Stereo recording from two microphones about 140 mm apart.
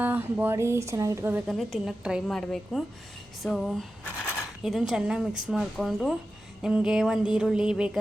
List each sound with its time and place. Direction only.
0.0 s speech: 10° right (ahead or behind)
1.5 s a woman's voice: centre (ahead or behind)